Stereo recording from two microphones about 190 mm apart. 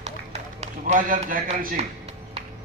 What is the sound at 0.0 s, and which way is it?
Run, 35° right (ahead or behind).